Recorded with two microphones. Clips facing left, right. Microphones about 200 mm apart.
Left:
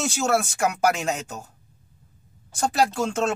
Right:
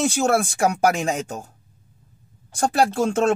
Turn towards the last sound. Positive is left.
turn(degrees=-55)  # may be behind; listen again after turning